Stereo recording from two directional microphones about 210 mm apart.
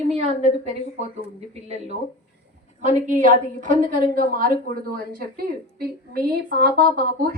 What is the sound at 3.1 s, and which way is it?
A woman's voice, 35° right (ahead or behind).